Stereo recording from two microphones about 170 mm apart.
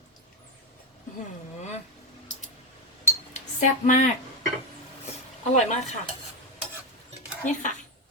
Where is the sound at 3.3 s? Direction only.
45° left (ahead or behind).